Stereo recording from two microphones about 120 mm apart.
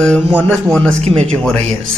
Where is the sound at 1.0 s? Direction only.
60° right (ahead or behind).